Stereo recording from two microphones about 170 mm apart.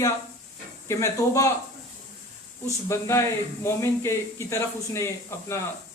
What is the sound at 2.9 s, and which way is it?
Speech, 15° left (ahead or behind).